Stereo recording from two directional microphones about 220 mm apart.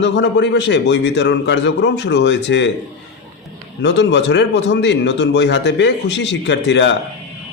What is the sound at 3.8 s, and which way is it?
Speech, 55° left (ahead or behind).